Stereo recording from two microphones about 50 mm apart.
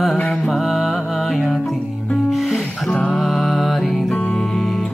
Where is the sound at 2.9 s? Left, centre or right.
Left.